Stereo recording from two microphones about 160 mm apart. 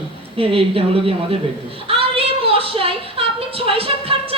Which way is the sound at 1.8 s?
35° right (ahead or behind).